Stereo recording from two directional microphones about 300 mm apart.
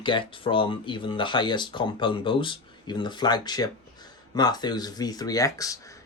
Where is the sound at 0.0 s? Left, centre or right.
Centre.